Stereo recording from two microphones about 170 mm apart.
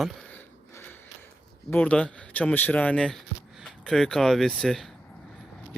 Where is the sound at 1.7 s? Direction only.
10° left (ahead or behind).